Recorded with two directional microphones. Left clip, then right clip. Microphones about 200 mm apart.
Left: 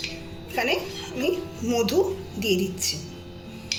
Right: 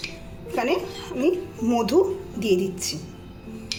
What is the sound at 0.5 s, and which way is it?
A woman's voice, 50° right (ahead or behind).